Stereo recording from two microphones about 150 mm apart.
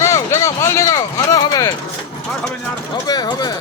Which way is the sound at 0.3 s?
20° left (ahead or behind).